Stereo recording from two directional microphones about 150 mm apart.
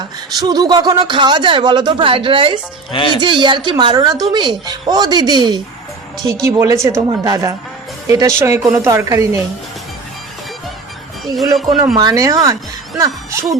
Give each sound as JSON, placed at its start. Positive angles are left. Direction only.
{"t": 0.3, "sound": "speech", "side_deg": -25}
{"t": 2.9, "sound": "speech", "side_deg": 35}
{"t": 3.2, "sound": "a woman's voice", "side_deg": -30}
{"t": 11.5, "sound": "speech", "side_deg": 0}
{"t": 11.9, "sound": "a woman's voice", "side_deg": -25}